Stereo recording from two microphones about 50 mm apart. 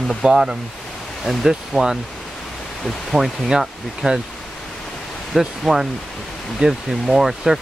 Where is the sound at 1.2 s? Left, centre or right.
Centre.